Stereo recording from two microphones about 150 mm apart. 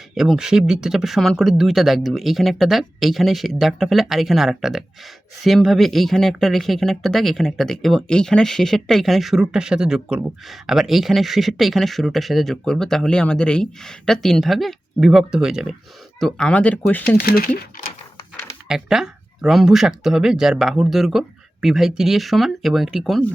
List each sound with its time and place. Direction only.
0.1 s speech: 5° right (ahead or behind)
16.2 s speech: 5° left (ahead or behind)
17.2 s speech: 90° left
18.7 s speech: 5° right (ahead or behind)